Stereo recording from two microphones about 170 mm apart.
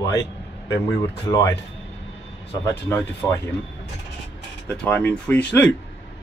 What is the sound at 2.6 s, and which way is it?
Speech, 15° left (ahead or behind).